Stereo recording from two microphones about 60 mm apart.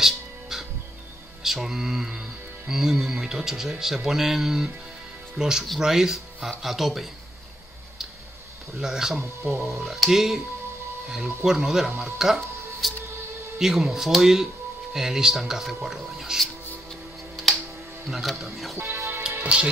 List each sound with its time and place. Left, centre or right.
0.0 s music: centre
1.4 s speech: centre
8.7 s speech: centre
11.4 s speech: centre
18.0 s speech: centre
18.8 s music: right
19.2 s music: centre